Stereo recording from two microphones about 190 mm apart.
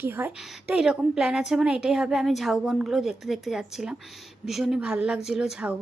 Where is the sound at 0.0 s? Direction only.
10° right (ahead or behind).